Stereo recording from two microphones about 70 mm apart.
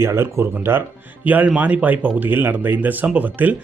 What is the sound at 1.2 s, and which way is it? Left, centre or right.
Speech, right.